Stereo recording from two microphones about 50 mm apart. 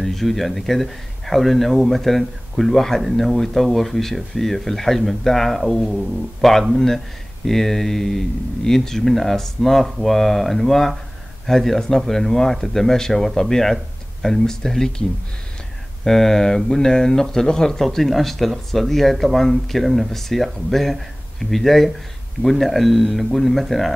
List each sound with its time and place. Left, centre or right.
0.0 s speech: centre